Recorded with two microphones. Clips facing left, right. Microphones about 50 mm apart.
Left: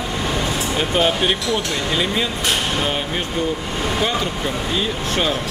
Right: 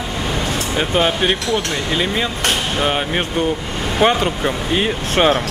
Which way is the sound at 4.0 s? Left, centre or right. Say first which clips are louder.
Right 10 dB; right.